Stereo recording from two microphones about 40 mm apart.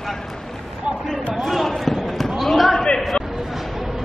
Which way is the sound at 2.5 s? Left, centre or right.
Centre.